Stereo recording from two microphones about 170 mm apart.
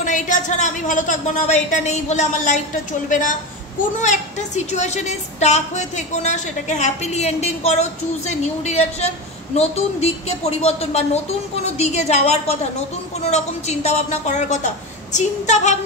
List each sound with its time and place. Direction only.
0.0 s a woman's voice: 50° left (ahead or behind)
4.7 s a woman's voice: 40° left (ahead or behind)